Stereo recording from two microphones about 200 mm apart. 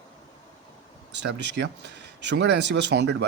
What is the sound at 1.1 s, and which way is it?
Speech, 60° right (ahead or behind).